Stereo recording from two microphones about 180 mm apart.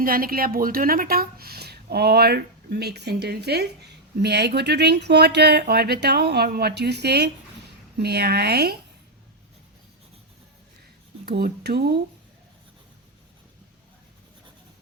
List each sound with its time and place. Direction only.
0.0 s a woman's voice: 55° right (ahead or behind)
11.3 s a woman's voice: 60° right (ahead or behind)